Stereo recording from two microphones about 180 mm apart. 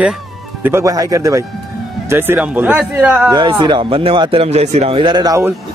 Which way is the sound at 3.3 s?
25° right (ahead or behind).